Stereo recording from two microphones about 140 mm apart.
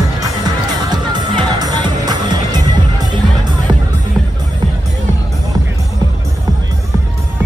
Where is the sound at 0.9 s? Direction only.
30° right (ahead or behind).